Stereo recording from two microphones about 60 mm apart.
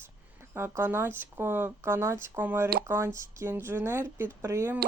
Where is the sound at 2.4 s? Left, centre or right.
Right.